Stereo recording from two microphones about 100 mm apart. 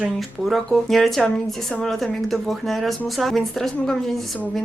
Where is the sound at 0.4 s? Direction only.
Centre (ahead or behind).